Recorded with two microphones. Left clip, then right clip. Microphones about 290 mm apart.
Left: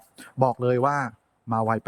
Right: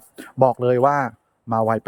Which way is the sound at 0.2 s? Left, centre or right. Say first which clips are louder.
Right 6 dB; centre.